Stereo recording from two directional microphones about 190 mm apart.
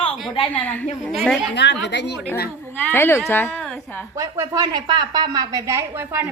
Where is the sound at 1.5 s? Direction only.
65° left (ahead or behind).